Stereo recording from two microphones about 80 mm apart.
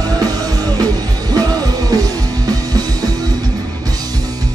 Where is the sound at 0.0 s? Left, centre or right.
Right.